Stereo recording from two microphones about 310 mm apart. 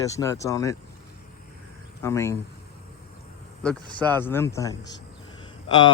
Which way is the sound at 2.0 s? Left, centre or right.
Centre.